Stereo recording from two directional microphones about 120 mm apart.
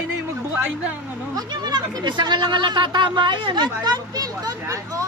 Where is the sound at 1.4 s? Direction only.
35° right (ahead or behind).